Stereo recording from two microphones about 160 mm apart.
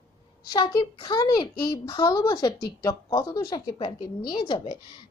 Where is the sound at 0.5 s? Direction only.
30° left (ahead or behind).